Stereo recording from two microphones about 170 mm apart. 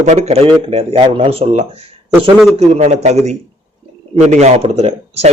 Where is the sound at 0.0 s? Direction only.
40° right (ahead or behind).